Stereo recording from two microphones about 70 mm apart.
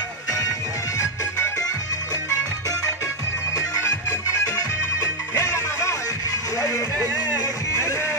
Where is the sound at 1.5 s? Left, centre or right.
Left.